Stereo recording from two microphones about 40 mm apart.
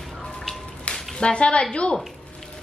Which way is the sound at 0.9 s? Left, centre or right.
Left.